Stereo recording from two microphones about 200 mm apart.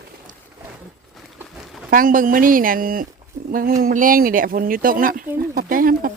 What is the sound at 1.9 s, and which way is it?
Speech, 45° right (ahead or behind).